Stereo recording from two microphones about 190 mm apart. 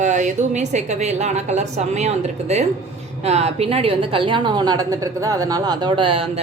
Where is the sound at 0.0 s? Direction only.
40° right (ahead or behind).